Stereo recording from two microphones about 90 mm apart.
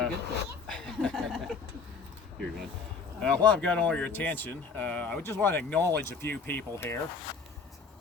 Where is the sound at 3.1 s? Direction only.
10° left (ahead or behind).